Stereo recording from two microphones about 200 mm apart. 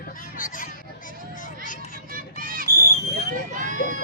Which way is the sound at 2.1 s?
45° right (ahead or behind).